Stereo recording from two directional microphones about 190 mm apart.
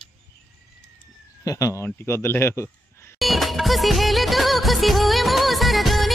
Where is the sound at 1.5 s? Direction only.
15° left (ahead or behind).